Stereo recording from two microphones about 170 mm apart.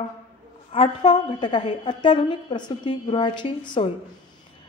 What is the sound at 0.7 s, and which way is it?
A woman's voice, 25° left (ahead or behind).